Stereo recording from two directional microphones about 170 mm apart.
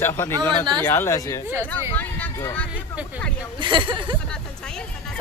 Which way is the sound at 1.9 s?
10° left (ahead or behind).